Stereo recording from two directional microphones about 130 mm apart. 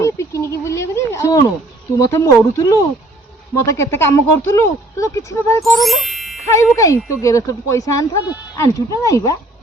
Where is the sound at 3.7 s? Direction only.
20° left (ahead or behind).